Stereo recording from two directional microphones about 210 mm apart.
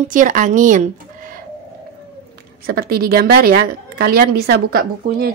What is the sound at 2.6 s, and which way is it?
A woman's voice, 45° right (ahead or behind).